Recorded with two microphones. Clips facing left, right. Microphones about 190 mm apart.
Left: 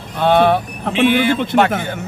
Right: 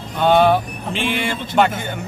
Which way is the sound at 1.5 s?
65° left (ahead or behind).